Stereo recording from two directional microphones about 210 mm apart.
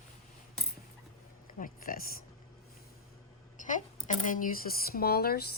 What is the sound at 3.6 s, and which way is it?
Speech, 35° left (ahead or behind).